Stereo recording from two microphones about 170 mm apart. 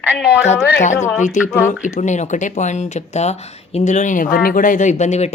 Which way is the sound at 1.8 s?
45° left (ahead or behind).